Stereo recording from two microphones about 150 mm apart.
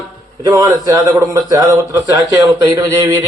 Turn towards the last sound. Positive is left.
turn(degrees=-20)  # may be behind; listen again after turning